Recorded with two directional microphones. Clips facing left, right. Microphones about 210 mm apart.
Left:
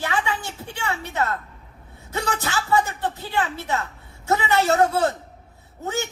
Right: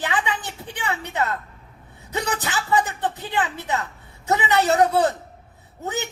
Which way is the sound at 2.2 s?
20° right (ahead or behind).